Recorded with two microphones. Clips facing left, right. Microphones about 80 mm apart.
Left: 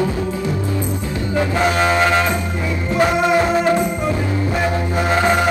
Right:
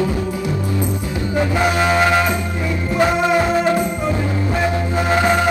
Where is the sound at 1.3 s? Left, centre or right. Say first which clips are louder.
Even; centre.